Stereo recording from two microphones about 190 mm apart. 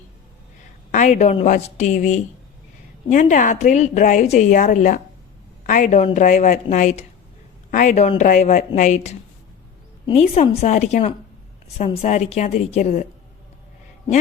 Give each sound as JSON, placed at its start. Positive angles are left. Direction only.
{"t": 0.9, "sound": "speech", "side_deg": 40}